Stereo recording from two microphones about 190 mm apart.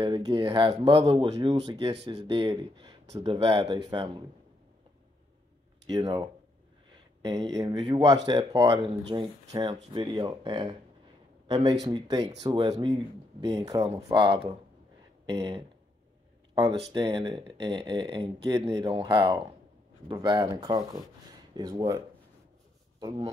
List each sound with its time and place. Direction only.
0.0 s speech: 25° right (ahead or behind)
5.9 s speech: 25° right (ahead or behind)